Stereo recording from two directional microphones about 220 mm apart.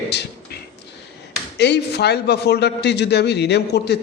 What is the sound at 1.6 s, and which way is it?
A man's voice, 50° left (ahead or behind).